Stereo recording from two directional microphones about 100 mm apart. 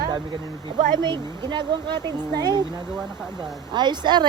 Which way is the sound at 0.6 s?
50° right (ahead or behind).